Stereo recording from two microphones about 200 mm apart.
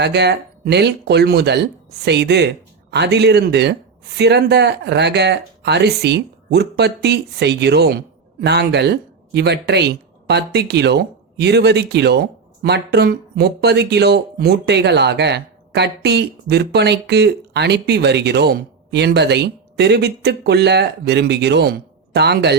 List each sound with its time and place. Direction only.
0.0 s speech: 55° right (ahead or behind)